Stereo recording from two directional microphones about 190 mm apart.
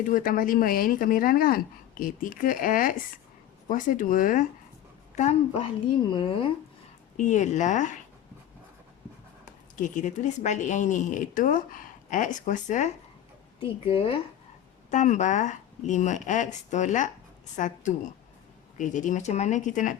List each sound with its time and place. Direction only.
0.0 s a woman's voice: 45° left (ahead or behind); by 6.5 s 25° left (ahead or behind)
7.2 s a woman's voice: 40° left (ahead or behind)
9.8 s a woman's voice: 40° left (ahead or behind)
13.9 s speech: 30° left (ahead or behind)
14.8 s a woman's voice: 40° left (ahead or behind)